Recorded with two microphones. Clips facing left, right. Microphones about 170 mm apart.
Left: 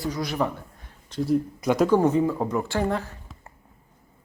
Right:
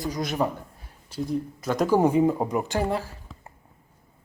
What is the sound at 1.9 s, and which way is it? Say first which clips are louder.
Speech: even; 10° right (ahead or behind).